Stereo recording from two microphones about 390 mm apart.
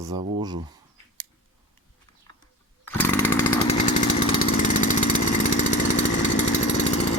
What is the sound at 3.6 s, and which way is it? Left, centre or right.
Lawn mower, centre.